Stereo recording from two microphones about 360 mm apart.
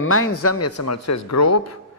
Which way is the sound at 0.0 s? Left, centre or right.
Left.